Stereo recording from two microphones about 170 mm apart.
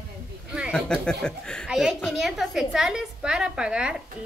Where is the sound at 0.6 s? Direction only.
5° right (ahead or behind).